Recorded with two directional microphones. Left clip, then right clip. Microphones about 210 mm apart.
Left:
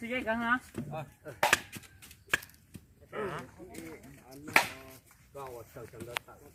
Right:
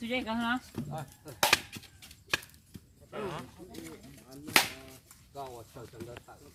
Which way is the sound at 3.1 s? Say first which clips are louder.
Left 1 dB; 20° right (ahead or behind).